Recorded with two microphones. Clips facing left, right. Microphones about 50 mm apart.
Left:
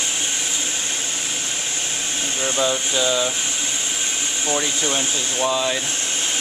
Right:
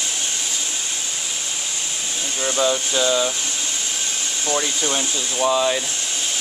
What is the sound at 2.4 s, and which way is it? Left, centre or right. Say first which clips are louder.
Speech: right 2 dB; centre.